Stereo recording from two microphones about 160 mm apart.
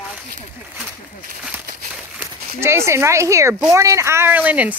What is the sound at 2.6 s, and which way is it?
Speech, 15° right (ahead or behind).